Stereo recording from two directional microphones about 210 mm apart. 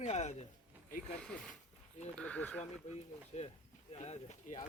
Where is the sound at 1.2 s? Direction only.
5° left (ahead or behind).